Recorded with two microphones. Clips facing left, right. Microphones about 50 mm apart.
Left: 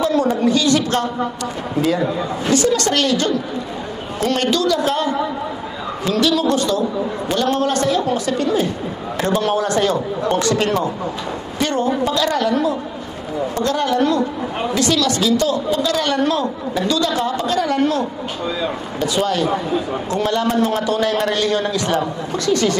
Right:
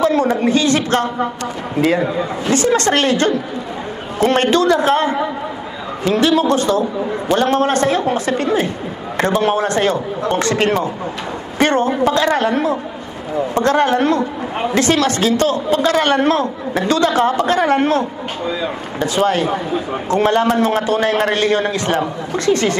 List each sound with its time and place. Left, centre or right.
0.0 s a woman's voice: right
19.0 s a woman's voice: right
20.1 s a woman's voice: right